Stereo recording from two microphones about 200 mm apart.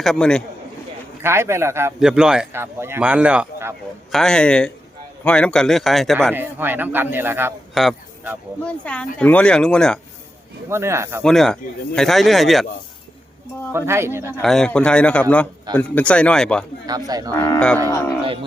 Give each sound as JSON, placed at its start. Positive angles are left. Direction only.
{"t": 0.0, "sound": "a man's voice", "side_deg": 5}
{"t": 1.2, "sound": "a man's voice", "side_deg": -15}
{"t": 4.1, "sound": "a man's voice", "side_deg": 5}
{"t": 6.3, "sound": "a man's voice", "side_deg": -10}
{"t": 7.7, "sound": "a man's voice", "side_deg": 0}
{"t": 10.7, "sound": "a man's voice", "side_deg": -15}
{"t": 11.2, "sound": "a man's voice", "side_deg": 5}
{"t": 13.7, "sound": "a man's voice", "side_deg": -15}
{"t": 14.4, "sound": "a man's voice", "side_deg": 0}
{"t": 16.8, "sound": "speech", "side_deg": -20}
{"t": 17.3, "sound": "speech", "side_deg": 10}